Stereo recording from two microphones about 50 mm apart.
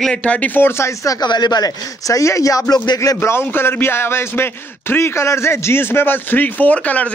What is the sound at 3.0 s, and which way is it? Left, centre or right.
Speech, left.